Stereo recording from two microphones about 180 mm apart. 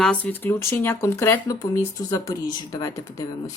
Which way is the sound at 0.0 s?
5° left (ahead or behind).